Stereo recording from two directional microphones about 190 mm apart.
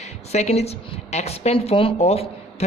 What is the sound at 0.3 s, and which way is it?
Speech, 35° left (ahead or behind).